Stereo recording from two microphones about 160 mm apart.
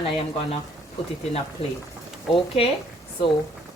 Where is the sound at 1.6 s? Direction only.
35° left (ahead or behind).